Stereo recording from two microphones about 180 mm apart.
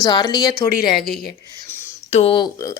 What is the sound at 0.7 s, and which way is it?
Speech, 55° left (ahead or behind).